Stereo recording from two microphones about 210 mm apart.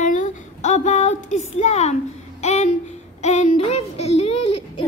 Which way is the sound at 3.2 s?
30° left (ahead or behind).